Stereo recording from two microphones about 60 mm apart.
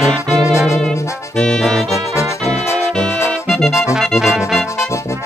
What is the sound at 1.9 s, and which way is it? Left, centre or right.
Music, left.